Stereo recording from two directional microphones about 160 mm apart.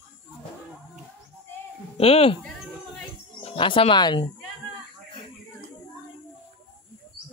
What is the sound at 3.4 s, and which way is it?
Speech, 30° left (ahead or behind).